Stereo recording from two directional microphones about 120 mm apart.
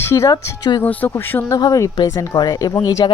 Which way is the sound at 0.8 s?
15° left (ahead or behind).